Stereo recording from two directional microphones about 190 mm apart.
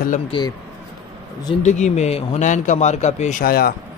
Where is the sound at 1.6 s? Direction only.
35° left (ahead or behind).